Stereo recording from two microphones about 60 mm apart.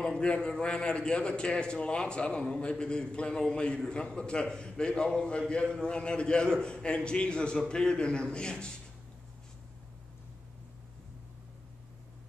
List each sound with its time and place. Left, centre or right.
0.0 s a man's voice: centre